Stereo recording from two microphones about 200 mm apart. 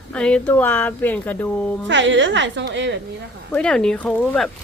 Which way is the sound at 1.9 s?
65° right (ahead or behind).